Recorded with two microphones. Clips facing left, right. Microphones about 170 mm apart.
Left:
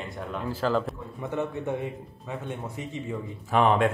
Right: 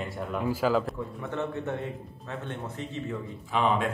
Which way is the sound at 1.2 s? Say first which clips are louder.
Left 3 dB; 10° left (ahead or behind).